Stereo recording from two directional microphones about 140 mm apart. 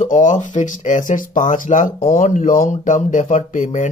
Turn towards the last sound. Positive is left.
turn(degrees=60)  # may be behind; listen again after turning